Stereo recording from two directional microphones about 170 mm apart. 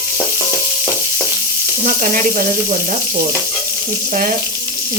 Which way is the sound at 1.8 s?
55° right (ahead or behind).